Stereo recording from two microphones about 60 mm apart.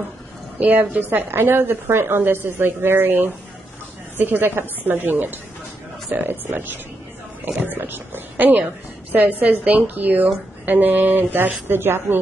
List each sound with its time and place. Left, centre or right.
0.6 s a woman's voice: right